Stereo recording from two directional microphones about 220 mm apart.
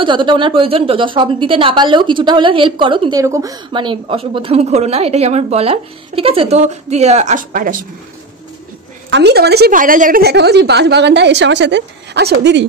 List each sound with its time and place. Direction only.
0.0 s a woman's voice: 20° right (ahead or behind); by 7.8 s 35° right (ahead or behind)
9.1 s a woman's voice: 50° right (ahead or behind)